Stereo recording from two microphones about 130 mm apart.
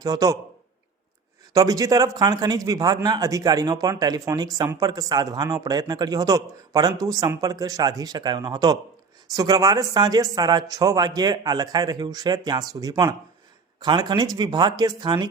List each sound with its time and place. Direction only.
0.0 s speech: 30° right (ahead or behind)
1.5 s speech: 25° right (ahead or behind)